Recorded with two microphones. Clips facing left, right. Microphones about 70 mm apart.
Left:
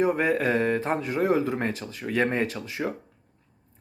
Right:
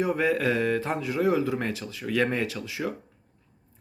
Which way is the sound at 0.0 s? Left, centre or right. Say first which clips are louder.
Left 1 dB; left.